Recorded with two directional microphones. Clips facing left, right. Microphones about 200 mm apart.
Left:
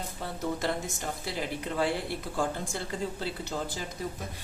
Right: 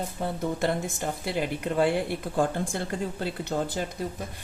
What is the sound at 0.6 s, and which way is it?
A woman's voice, 55° right (ahead or behind).